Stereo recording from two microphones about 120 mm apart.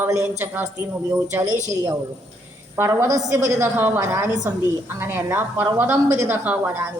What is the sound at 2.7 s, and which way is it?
Speech, 20° right (ahead or behind).